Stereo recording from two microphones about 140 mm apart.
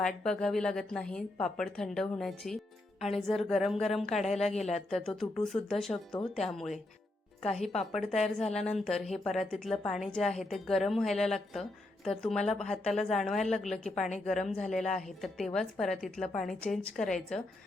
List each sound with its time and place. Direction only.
0.0 s a woman's voice: 5° left (ahead or behind)
4.5 s a woman's voice: 55° left (ahead or behind)
4.9 s a woman's voice: 5° left (ahead or behind)